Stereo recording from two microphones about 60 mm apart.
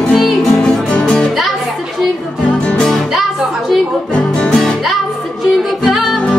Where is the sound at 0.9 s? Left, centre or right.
Centre.